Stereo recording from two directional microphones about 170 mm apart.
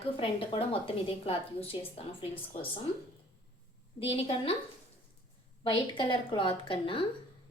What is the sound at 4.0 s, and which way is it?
Speech, 35° left (ahead or behind).